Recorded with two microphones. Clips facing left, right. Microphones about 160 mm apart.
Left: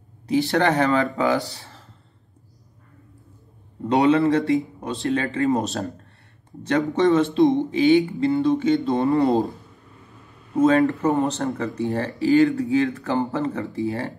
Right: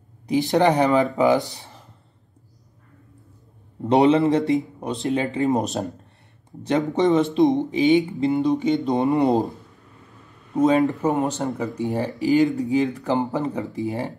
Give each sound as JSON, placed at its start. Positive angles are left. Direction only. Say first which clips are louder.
{"t": 0.3, "sound": "speech", "louder": "right 1 dB", "side_deg": -20}
{"t": 3.9, "sound": "speech", "louder": "right 1 dB", "side_deg": -20}
{"t": 6.9, "sound": "speech", "louder": "left 1 dB", "side_deg": -20}
{"t": 10.5, "sound": "speech", "louder": "left 1 dB", "side_deg": -15}